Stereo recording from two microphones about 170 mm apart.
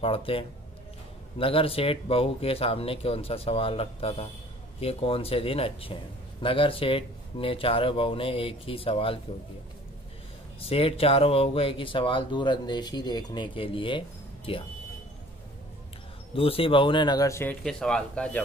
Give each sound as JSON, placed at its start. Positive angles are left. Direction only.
{"t": 0.0, "sound": "speech", "side_deg": 35}
{"t": 10.6, "sound": "speech", "side_deg": 35}
{"t": 16.3, "sound": "speech", "side_deg": 35}
{"t": 17.6, "sound": "speech", "side_deg": 5}